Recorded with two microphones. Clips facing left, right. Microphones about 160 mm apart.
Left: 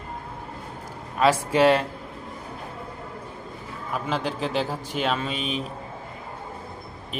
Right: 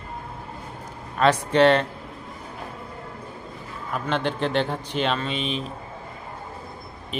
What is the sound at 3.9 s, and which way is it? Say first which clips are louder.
A man's voice: right 2 dB; 5° left (ahead or behind).